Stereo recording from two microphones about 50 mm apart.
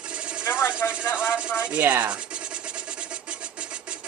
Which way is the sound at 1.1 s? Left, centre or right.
Left.